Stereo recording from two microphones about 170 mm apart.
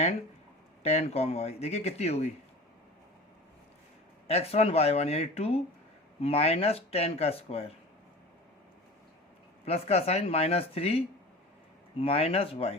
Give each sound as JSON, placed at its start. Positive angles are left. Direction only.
{"t": 0.8, "sound": "speech", "side_deg": 40}
{"t": 4.3, "sound": "speech", "side_deg": 35}
{"t": 9.6, "sound": "speech", "side_deg": 35}